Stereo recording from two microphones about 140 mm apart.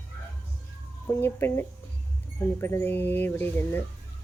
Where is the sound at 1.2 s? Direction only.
15° left (ahead or behind).